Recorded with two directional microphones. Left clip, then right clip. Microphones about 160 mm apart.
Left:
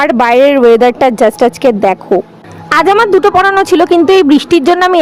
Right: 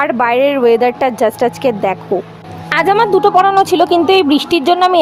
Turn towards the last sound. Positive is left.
turn(degrees=40)  # may be behind; listen again after turning